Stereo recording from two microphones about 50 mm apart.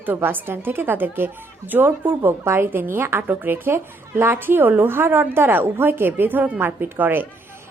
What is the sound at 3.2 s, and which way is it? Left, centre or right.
A woman's voice, right.